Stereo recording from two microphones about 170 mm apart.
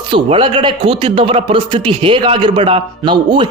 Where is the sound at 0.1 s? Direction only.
30° right (ahead or behind).